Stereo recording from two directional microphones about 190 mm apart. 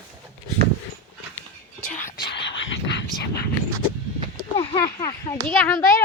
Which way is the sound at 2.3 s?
70° left (ahead or behind).